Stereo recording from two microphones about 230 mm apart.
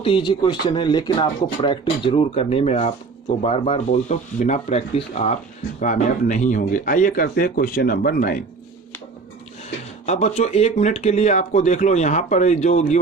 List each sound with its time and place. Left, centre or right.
0.0 s speech: left
10.1 s speech: left